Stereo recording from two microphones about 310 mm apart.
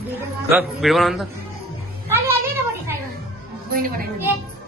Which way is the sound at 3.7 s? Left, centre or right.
Right.